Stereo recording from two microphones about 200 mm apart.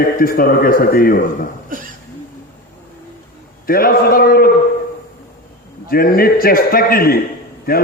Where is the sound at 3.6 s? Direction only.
45° left (ahead or behind).